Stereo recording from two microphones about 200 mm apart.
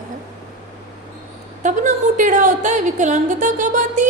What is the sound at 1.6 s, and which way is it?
A woman's voice, 40° right (ahead or behind).